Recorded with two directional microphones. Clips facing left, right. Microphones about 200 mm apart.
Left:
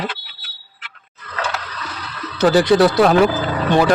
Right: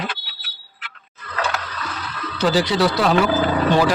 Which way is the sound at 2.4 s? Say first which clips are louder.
Left 6 dB; 50° left (ahead or behind).